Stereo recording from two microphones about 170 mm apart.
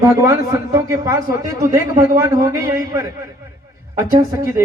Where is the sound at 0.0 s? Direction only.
15° right (ahead or behind).